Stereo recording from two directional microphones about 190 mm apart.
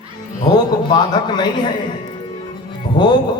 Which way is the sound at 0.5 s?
20° left (ahead or behind).